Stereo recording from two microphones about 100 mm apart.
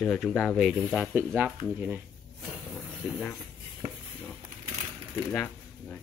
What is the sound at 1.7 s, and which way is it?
Speech, 15° right (ahead or behind).